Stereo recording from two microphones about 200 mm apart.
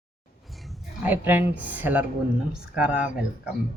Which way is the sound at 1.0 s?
10° right (ahead or behind).